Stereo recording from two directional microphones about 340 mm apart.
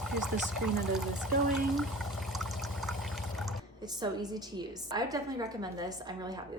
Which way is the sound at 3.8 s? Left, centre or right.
Centre.